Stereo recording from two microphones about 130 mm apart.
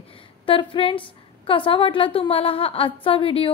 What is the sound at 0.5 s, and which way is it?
A woman's voice, 45° left (ahead or behind).